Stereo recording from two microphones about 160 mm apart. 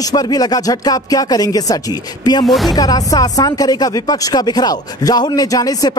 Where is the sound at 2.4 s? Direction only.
Centre (ahead or behind).